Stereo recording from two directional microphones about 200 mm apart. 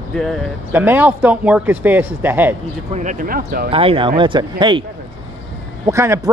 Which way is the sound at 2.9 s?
40° right (ahead or behind).